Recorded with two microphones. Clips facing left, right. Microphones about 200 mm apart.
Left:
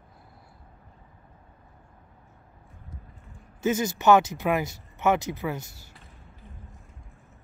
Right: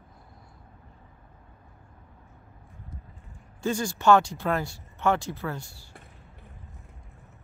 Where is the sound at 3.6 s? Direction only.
20° left (ahead or behind).